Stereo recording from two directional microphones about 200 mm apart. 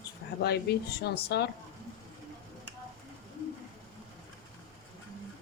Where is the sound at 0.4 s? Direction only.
50° left (ahead or behind).